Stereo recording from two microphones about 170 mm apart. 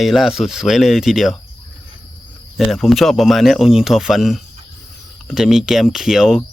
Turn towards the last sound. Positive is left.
turn(degrees=-5)  # may be behind; listen again after turning